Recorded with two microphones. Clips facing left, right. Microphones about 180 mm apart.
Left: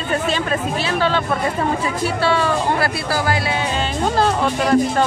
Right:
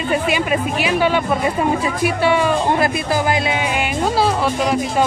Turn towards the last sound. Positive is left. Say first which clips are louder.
# left 2 dB
turn(degrees=-5)  # may be behind; listen again after turning